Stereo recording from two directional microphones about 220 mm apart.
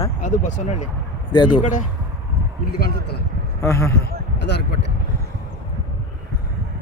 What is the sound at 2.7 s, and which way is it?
Speech, 45° left (ahead or behind).